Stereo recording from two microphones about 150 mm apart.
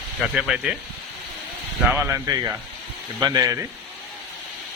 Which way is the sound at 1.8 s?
15° right (ahead or behind).